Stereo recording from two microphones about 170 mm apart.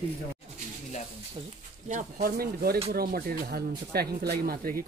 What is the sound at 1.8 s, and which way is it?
Speech, 45° right (ahead or behind).